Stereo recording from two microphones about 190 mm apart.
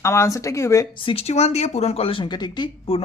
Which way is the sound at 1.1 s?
35° left (ahead or behind).